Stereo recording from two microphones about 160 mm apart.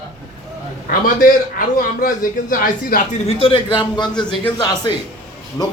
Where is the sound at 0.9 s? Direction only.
60° left (ahead or behind).